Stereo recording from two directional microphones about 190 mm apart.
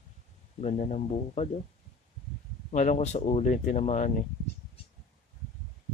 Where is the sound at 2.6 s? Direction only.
40° left (ahead or behind).